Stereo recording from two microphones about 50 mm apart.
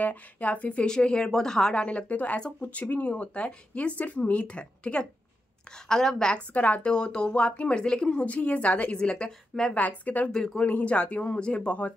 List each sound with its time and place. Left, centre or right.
0.0 s speech: left
0.8 s a woman's voice: centre
5.9 s a woman's voice: centre
6.5 s speech: left
8.9 s a woman's voice: centre
9.8 s a woman's voice: left
10.3 s a woman's voice: centre
10.6 s speech: left